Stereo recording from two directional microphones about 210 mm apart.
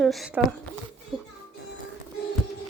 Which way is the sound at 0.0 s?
Centre (ahead or behind).